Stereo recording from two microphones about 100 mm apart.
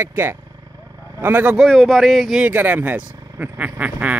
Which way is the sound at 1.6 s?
5° left (ahead or behind).